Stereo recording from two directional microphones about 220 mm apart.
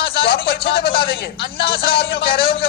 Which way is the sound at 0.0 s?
45° left (ahead or behind).